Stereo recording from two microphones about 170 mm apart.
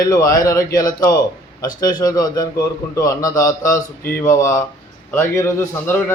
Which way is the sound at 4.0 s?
60° left (ahead or behind).